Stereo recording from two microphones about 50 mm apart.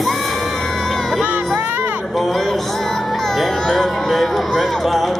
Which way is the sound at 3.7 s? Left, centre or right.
Centre.